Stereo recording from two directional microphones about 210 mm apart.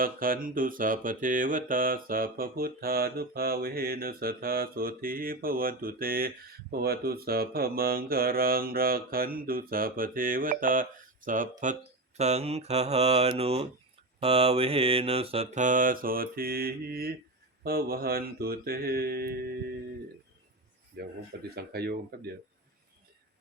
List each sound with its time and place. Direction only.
0.0 s mantra: 40° right (ahead or behind)
20.9 s mantra: 50° right (ahead or behind)